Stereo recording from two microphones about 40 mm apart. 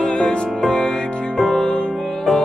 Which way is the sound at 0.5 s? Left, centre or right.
Centre.